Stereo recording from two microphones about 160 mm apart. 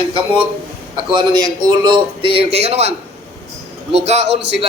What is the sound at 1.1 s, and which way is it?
A man's voice, 30° right (ahead or behind).